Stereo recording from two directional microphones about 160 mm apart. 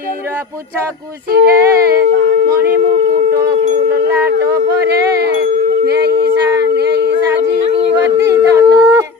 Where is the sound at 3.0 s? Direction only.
40° right (ahead or behind).